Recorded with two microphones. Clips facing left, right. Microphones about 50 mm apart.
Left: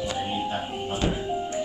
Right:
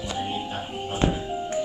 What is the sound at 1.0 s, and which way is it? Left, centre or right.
Music, right.